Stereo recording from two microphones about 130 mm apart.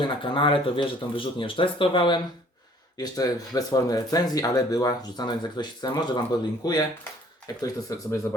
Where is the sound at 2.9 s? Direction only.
30° left (ahead or behind).